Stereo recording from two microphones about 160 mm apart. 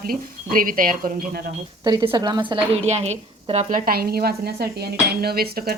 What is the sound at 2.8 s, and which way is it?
Speech, 45° right (ahead or behind).